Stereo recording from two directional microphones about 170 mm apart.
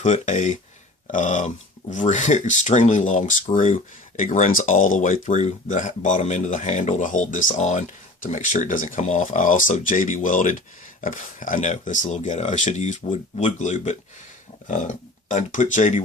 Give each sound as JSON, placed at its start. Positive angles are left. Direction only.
{"t": 0.0, "sound": "speech", "side_deg": 45}